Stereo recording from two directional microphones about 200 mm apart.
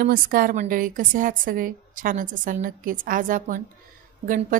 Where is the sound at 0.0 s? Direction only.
45° right (ahead or behind).